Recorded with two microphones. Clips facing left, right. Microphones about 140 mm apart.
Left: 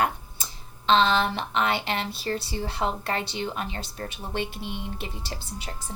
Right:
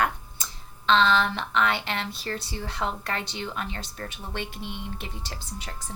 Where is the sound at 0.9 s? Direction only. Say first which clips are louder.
Left 1 dB; 20° left (ahead or behind).